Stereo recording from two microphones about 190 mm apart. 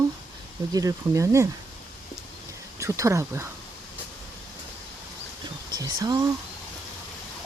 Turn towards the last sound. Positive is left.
turn(degrees=-20)  # may be behind; listen again after turning